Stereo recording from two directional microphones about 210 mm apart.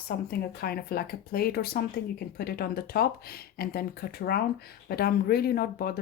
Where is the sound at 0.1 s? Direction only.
45° left (ahead or behind).